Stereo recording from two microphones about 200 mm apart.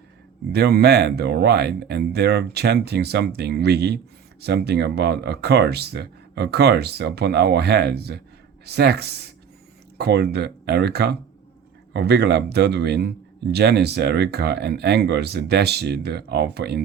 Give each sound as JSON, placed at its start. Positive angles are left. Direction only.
{"t": 0.5, "sound": "a man's voice", "side_deg": -55}